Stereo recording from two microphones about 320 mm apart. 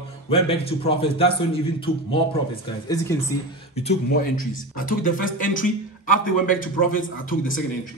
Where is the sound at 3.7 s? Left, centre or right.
Centre.